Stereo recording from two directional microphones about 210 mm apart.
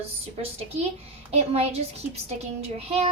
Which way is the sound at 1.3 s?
30° right (ahead or behind).